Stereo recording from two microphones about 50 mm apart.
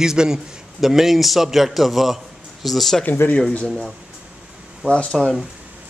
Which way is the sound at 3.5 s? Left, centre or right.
Centre.